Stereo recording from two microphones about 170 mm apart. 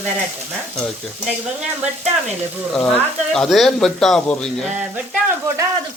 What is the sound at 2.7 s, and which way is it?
Speech, 5° left (ahead or behind).